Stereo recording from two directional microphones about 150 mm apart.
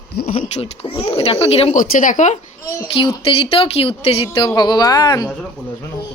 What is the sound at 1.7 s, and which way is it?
Speech, 60° left (ahead or behind).